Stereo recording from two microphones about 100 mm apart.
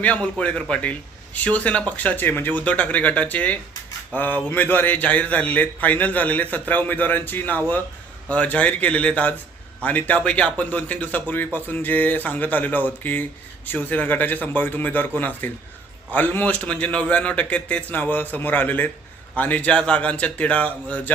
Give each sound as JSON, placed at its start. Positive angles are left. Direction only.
{"t": 0.0, "sound": "a man's voice", "side_deg": 10}